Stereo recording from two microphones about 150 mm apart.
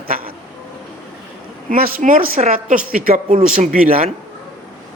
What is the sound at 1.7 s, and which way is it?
A man's voice, 65° right (ahead or behind).